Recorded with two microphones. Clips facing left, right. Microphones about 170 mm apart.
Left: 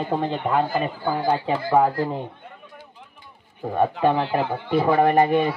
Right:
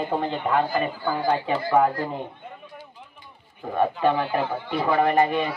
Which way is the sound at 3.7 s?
30° left (ahead or behind).